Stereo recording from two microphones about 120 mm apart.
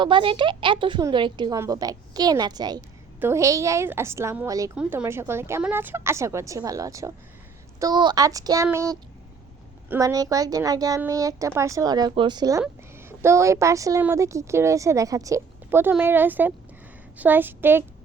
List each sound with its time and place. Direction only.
0.0 s a woman's voice: 45° right (ahead or behind)
1.5 s a woman's voice: 25° right (ahead or behind)
3.2 s a woman's voice: 20° right (ahead or behind)
4.7 s a woman's voice: 10° right (ahead or behind)
10.0 s a woman's voice: 30° right (ahead or behind)
13.0 s a woman's voice: 20° right (ahead or behind)